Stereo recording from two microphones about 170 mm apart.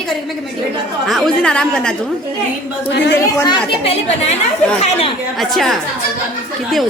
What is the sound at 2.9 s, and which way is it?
Speech, 90° left.